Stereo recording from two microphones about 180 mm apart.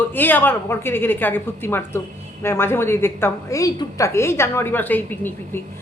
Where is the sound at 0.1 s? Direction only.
10° left (ahead or behind).